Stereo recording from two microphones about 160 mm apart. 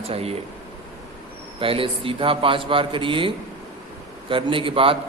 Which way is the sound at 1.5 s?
35° right (ahead or behind).